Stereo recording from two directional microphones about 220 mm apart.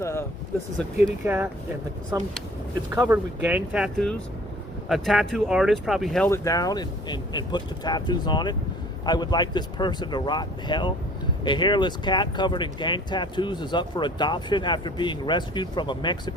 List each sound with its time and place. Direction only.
0.0 s vehicle: 15° left (ahead or behind)
1.2 s speech: 10° right (ahead or behind)
6.2 s speech: 15° left (ahead or behind)